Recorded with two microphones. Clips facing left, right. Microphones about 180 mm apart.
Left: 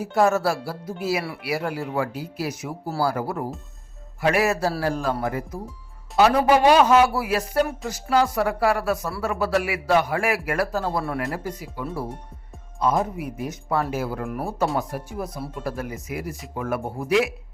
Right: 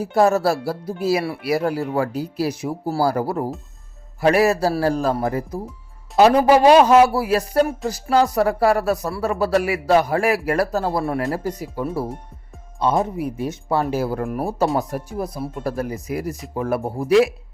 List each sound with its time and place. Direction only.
0.0 s speech: 35° right (ahead or behind)
12.8 s speech: 30° right (ahead or behind)